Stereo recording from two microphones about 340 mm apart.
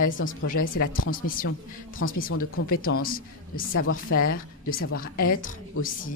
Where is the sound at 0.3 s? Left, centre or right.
Left.